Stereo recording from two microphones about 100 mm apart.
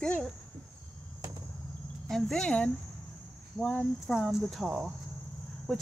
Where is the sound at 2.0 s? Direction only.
5° left (ahead or behind).